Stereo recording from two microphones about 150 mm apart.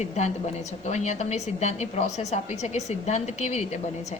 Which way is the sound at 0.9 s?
50° left (ahead or behind).